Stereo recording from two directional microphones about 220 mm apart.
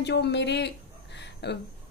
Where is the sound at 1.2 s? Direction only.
50° left (ahead or behind).